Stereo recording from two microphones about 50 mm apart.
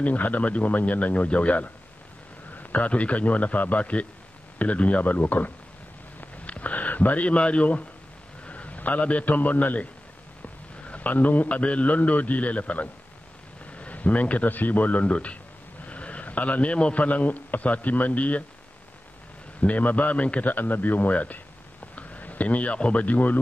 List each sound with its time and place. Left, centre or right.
0.0 s a man's voice: left
6.2 s a sound: left
8.5 s a man's voice: left
19.6 s a man's voice: left